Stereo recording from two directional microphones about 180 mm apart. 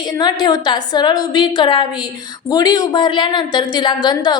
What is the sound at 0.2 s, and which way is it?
A woman's voice, 25° left (ahead or behind).